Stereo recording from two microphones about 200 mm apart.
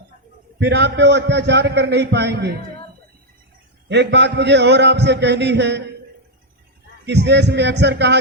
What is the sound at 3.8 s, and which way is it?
A man's voice, 60° right (ahead or behind).